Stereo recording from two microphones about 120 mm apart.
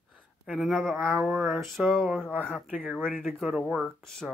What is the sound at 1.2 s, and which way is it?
Speech, 15° right (ahead or behind).